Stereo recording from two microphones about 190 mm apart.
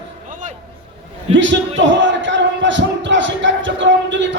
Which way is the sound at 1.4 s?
75° right (ahead or behind).